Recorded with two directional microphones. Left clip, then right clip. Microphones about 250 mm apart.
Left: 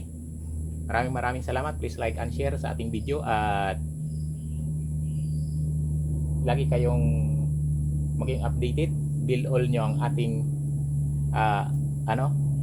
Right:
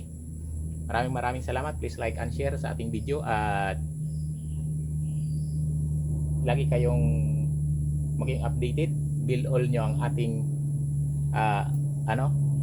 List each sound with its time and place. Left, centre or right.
0.9 s speech: centre
6.4 s speech: centre
8.2 s speech: centre